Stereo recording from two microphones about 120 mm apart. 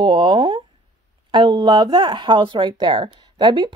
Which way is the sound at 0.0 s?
45° right (ahead or behind).